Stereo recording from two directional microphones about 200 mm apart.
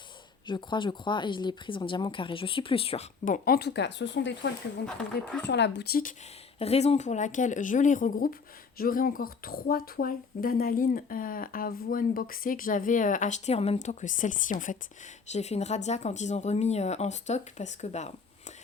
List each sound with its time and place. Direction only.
0.4 s speech: 25° left (ahead or behind)
3.2 s speech: 45° left (ahead or behind)
6.6 s speech: 30° left (ahead or behind)